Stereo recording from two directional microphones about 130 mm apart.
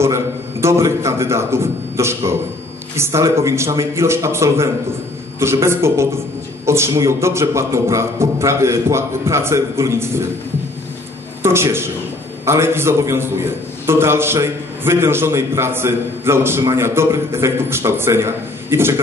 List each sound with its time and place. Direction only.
0.0 s a man's voice: 20° right (ahead or behind)
11.4 s a man's voice: 20° right (ahead or behind)